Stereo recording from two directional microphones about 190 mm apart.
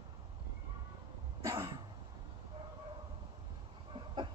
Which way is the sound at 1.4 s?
15° right (ahead or behind).